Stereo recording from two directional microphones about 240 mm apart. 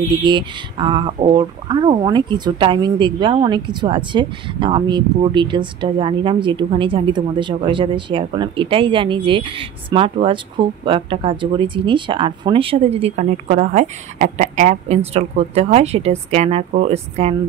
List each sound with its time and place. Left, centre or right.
0.2 s speech: centre